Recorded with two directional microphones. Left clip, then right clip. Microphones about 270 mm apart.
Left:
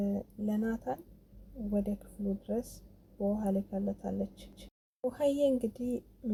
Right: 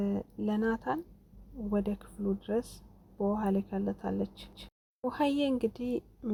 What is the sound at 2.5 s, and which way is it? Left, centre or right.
Speech, right.